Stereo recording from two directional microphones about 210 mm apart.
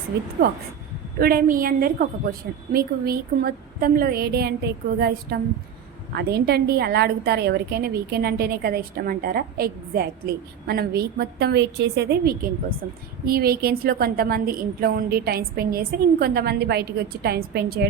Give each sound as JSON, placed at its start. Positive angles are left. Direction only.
{"t": 1.2, "sound": "a woman's voice", "side_deg": -45}